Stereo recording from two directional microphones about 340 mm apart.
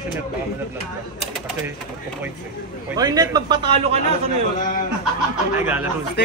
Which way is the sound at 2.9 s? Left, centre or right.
Centre.